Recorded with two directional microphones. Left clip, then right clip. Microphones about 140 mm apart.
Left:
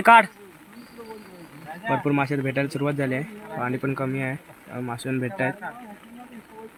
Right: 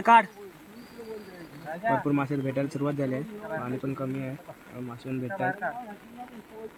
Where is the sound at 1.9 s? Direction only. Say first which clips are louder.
Left 4 dB; 20° left (ahead or behind).